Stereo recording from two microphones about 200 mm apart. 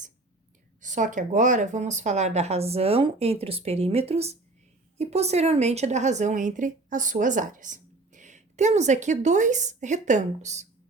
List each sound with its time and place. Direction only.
0.8 s a woman's voice: 40° right (ahead or behind)